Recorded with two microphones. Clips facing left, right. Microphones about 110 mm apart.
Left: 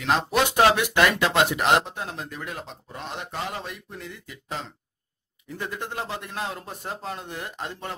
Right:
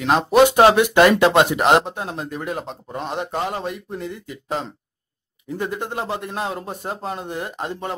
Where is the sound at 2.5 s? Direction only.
40° right (ahead or behind).